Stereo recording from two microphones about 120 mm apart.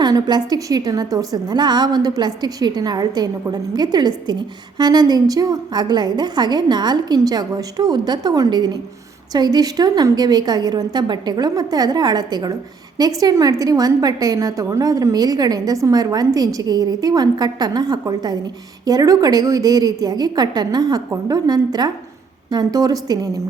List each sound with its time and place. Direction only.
0.0 s a woman's voice: 35° right (ahead or behind)